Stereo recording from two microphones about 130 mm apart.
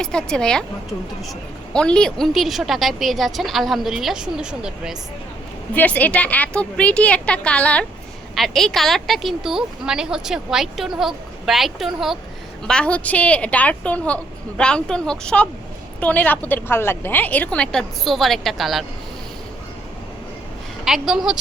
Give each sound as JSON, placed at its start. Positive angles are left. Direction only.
{"t": 0.0, "sound": "a woman's voice", "side_deg": 5}
{"t": 5.7, "sound": "a woman's voice", "side_deg": 10}
{"t": 20.8, "sound": "a woman's voice", "side_deg": -5}